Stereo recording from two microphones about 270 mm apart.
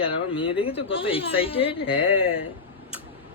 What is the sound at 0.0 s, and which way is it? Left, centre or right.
A woman's voice, centre.